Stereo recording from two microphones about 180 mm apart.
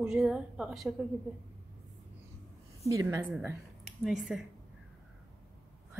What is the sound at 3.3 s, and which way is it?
A woman's voice, 5° right (ahead or behind).